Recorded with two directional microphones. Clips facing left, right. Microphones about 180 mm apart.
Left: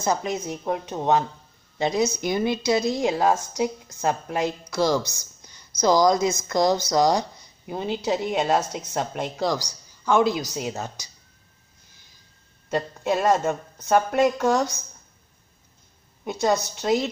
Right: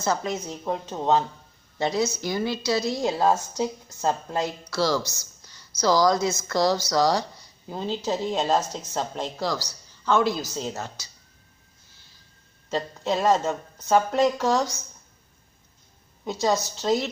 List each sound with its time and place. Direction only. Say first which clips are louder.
0.0 s a woman's voice: left 1 dB; 15° left (ahead or behind)
11.9 s a sound: left 1 dB; 15° left (ahead or behind)
12.6 s a woman's voice: left 2 dB; 10° left (ahead or behind)
16.8 s a woman's voice: left 1 dB; 15° left (ahead or behind)